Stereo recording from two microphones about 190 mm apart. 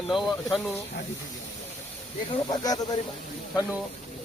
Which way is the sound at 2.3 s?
20° left (ahead or behind).